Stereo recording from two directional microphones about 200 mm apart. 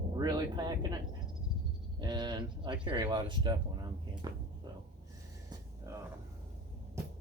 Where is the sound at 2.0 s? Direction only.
20° right (ahead or behind).